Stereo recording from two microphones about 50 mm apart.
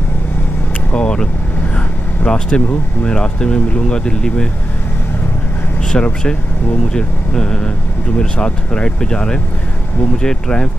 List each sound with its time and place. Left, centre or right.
0.9 s vehicle: centre
2.2 s speech: left
5.9 s speech: centre